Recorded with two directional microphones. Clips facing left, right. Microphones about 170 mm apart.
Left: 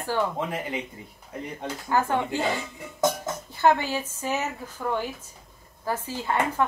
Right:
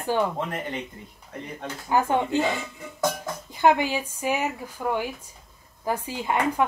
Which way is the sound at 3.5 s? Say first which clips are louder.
Right 1 dB; 15° right (ahead or behind).